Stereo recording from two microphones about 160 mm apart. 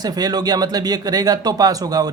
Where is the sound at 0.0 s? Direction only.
25° right (ahead or behind).